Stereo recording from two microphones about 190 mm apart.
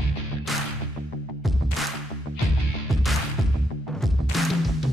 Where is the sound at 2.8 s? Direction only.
Centre (ahead or behind).